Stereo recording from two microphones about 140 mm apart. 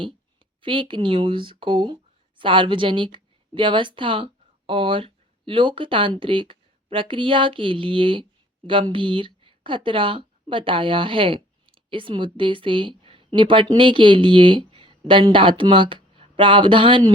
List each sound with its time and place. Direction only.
0.6 s speech: 35° right (ahead or behind)